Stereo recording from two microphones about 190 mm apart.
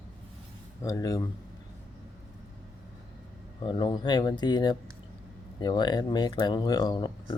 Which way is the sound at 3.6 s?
25° left (ahead or behind).